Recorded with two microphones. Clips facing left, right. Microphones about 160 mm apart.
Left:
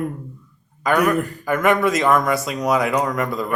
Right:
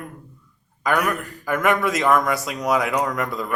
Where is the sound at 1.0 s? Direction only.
15° left (ahead or behind).